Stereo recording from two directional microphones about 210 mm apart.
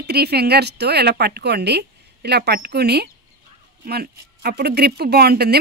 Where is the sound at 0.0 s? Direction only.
50° right (ahead or behind).